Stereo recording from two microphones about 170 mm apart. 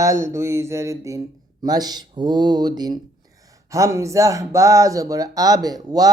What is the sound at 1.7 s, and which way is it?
Speech, 25° right (ahead or behind).